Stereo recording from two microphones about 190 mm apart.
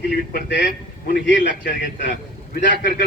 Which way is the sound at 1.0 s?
45° left (ahead or behind).